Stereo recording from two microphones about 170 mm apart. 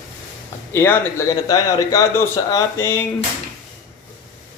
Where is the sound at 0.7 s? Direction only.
15° left (ahead or behind).